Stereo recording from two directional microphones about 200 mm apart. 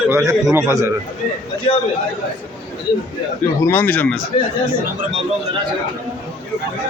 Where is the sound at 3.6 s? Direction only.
10° left (ahead or behind).